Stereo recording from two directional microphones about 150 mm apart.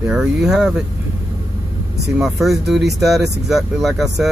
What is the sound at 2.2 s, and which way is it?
Speech, centre (ahead or behind).